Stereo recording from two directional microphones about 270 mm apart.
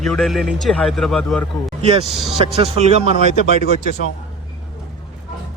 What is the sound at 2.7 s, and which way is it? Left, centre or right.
Speech, right.